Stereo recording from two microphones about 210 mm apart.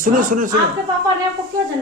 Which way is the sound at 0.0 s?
40° right (ahead or behind).